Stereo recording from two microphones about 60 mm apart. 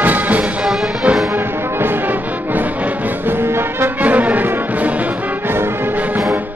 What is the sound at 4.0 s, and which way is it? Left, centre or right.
Brass instrument, right.